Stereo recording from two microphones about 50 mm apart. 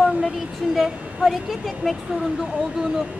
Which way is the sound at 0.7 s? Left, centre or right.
Centre.